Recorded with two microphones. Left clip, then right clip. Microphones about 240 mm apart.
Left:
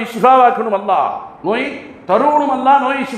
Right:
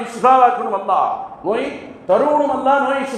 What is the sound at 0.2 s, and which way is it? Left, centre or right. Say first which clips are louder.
A man's voice: left 2 dB; left.